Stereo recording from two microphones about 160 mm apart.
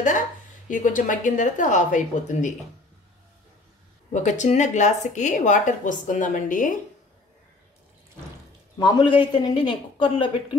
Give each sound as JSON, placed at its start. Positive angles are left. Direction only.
{"t": 0.7, "sound": "speech", "side_deg": 55}
{"t": 4.1, "sound": "speech", "side_deg": 50}
{"t": 8.7, "sound": "a man's voice", "side_deg": 30}